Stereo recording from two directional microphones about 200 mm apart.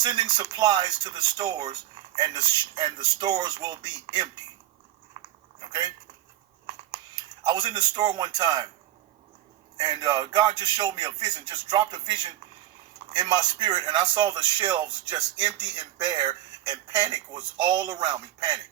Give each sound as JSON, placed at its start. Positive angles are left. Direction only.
{"t": 0.0, "sound": "speech", "side_deg": -20}
{"t": 5.2, "sound": "a sound", "side_deg": -25}
{"t": 7.4, "sound": "speech", "side_deg": -20}
{"t": 9.7, "sound": "speech", "side_deg": -20}